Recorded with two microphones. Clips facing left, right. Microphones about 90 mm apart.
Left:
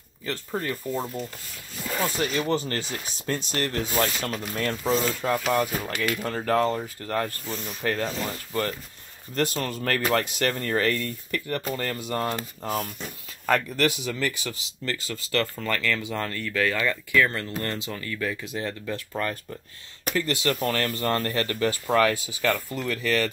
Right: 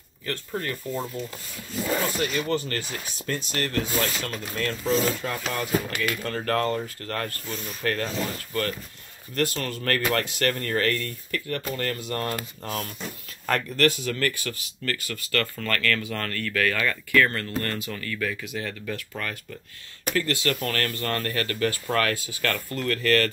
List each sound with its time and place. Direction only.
0.6 s speech: 5° left (ahead or behind)
2.1 s speech: 20° left (ahead or behind)
14.5 s speech: 20° left (ahead or behind)
18.4 s speech: 30° left (ahead or behind); by 23.3 s 10° left (ahead or behind)